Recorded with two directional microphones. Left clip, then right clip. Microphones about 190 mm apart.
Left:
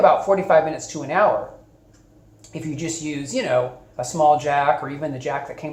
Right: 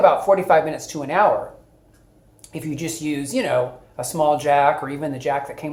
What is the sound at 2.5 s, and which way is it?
Speech, 50° right (ahead or behind).